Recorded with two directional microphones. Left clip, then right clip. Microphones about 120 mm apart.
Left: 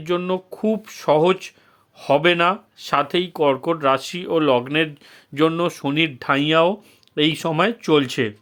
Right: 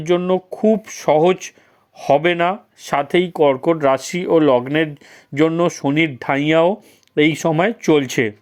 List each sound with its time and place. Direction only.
0.0 s speech: 20° right (ahead or behind)
3.8 s speech: 35° right (ahead or behind)